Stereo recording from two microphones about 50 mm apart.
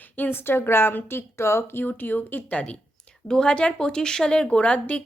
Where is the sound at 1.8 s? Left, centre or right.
Left.